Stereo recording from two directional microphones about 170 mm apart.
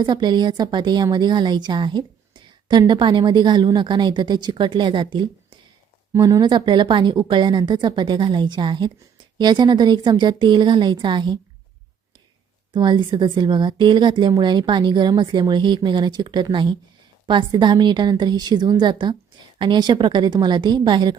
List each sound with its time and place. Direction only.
0.0 s a woman's voice: 25° right (ahead or behind)
12.7 s a woman's voice: 25° right (ahead or behind)